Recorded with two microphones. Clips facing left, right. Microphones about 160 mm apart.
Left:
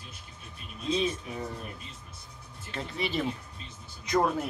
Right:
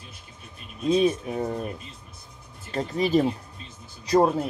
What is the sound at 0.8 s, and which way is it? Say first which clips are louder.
Speech: right 8 dB; 50° right (ahead or behind).